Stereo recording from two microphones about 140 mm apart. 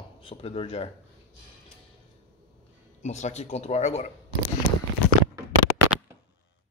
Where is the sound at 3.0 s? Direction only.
55° left (ahead or behind).